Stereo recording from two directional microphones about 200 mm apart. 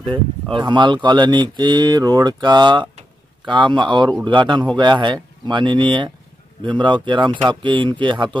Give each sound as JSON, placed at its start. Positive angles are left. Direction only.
{"t": 0.0, "sound": "speech", "side_deg": -25}